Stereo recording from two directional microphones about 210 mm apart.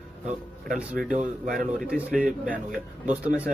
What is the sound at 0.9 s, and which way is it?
Speech, 5° right (ahead or behind).